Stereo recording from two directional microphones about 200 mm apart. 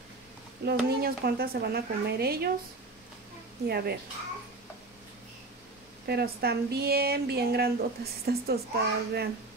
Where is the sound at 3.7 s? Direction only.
50° right (ahead or behind).